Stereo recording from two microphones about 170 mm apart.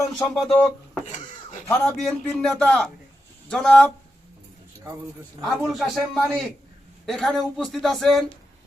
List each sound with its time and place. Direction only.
0.2 s a man's voice: 5° left (ahead or behind)
1.0 s a sound: 45° left (ahead or behind)
2.0 s a man's voice: 5° left (ahead or behind)
5.5 s a man's voice: centre (ahead or behind)